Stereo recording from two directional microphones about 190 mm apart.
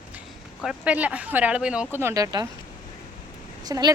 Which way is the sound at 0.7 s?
5° right (ahead or behind).